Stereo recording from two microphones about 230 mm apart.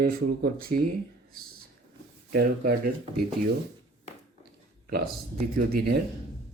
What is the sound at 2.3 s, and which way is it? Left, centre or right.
Speech, right.